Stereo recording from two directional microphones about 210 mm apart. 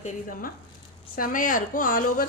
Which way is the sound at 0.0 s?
40° left (ahead or behind).